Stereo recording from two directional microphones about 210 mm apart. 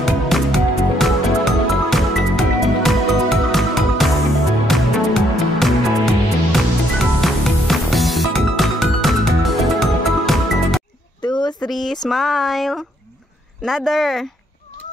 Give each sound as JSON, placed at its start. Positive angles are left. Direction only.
{"t": 0.0, "sound": "music", "side_deg": 0}
{"t": 11.2, "sound": "a sound", "side_deg": 20}
{"t": 11.6, "sound": "speech", "side_deg": 0}